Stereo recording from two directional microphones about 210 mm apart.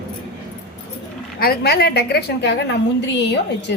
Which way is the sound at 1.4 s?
45° left (ahead or behind).